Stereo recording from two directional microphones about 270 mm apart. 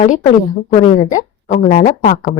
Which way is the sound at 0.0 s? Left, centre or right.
Left.